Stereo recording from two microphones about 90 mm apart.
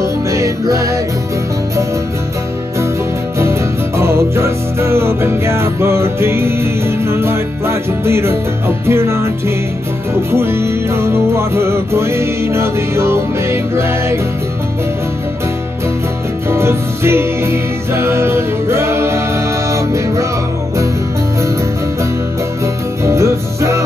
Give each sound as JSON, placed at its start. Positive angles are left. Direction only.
{"t": 0.0, "sound": "music", "side_deg": -35}
{"t": 3.3, "sound": "music", "side_deg": -30}
{"t": 10.3, "sound": "music", "side_deg": -30}
{"t": 16.4, "sound": "music", "side_deg": -30}
{"t": 23.0, "sound": "music", "side_deg": -35}